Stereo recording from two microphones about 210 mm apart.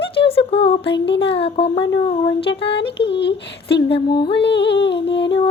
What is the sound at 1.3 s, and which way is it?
Child singing, 25° left (ahead or behind).